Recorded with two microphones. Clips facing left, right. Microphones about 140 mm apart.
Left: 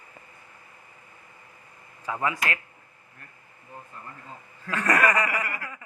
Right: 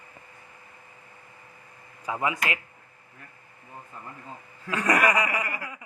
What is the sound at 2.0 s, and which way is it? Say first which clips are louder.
Speech: even; 15° right (ahead or behind).